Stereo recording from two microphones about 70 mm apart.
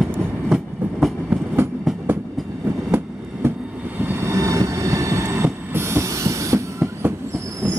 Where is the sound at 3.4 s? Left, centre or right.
Right.